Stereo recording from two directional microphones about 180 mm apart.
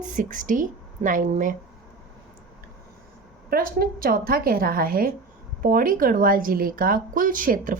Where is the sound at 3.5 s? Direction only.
55° right (ahead or behind).